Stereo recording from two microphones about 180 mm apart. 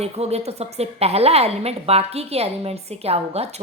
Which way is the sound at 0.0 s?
35° right (ahead or behind).